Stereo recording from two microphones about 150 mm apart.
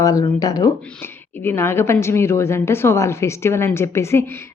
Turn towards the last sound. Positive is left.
turn(degrees=15)  # may be behind; listen again after turning